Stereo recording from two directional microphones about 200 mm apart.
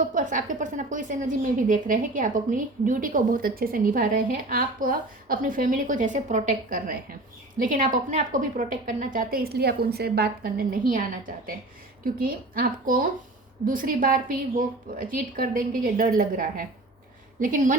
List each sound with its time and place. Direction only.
0.1 s a woman's voice: 40° right (ahead or behind)
12.0 s a woman's voice: 45° right (ahead or behind)